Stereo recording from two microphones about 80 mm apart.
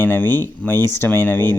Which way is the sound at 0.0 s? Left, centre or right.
Left.